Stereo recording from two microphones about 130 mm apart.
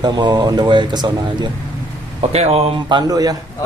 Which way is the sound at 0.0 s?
35° right (ahead or behind).